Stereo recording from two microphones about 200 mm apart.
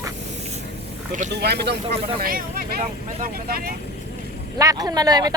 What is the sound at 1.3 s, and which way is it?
Speech, 55° right (ahead or behind).